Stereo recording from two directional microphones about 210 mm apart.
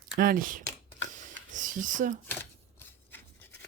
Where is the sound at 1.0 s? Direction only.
35° right (ahead or behind).